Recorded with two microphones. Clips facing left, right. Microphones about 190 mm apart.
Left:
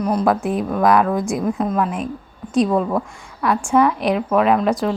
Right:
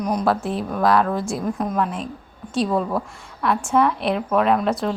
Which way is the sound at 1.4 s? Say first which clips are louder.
Left 3 dB; centre (ahead or behind).